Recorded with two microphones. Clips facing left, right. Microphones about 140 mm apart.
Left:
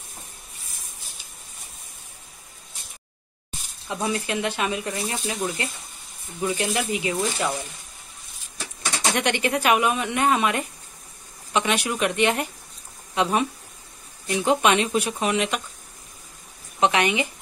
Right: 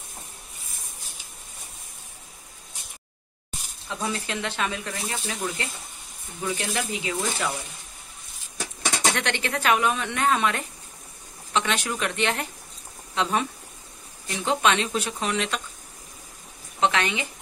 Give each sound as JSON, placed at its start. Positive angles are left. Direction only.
{"t": 3.9, "sound": "speech", "side_deg": 15}
{"t": 6.4, "sound": "speech", "side_deg": 15}
{"t": 9.1, "sound": "speech", "side_deg": 15}
{"t": 16.8, "sound": "speech", "side_deg": 15}